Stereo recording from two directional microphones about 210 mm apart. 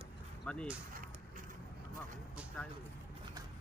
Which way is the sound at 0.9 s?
40° right (ahead or behind).